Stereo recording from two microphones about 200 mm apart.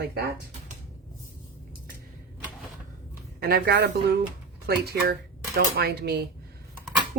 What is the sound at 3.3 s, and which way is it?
Speech, 50° right (ahead or behind).